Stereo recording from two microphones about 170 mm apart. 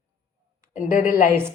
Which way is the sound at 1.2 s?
15° right (ahead or behind).